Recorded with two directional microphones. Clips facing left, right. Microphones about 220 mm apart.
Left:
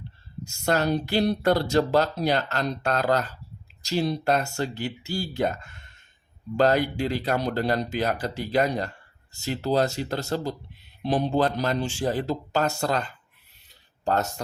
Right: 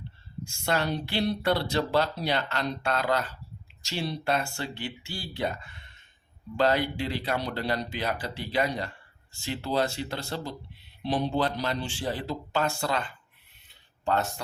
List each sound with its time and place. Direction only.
0.4 s speech: 40° left (ahead or behind)